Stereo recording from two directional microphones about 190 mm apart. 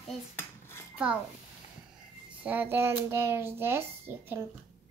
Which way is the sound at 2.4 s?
10° right (ahead or behind).